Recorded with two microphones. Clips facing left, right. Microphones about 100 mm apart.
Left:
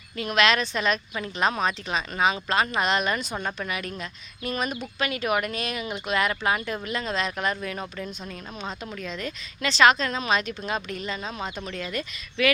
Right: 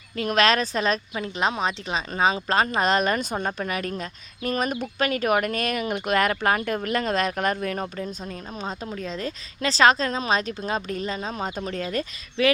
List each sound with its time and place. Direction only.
0.2 s a woman's voice: 40° right (ahead or behind)